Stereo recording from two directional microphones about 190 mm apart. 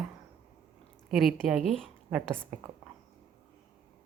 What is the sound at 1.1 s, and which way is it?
A woman's voice, centre (ahead or behind).